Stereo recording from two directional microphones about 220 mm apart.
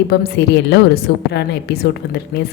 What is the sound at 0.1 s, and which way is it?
A woman's voice, 50° left (ahead or behind).